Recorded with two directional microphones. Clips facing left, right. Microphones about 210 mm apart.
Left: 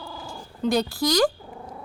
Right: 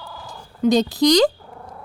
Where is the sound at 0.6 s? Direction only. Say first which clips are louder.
Right 7 dB; 20° right (ahead or behind).